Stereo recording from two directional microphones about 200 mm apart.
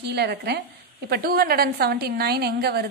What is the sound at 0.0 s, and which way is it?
A woman's voice, 55° right (ahead or behind).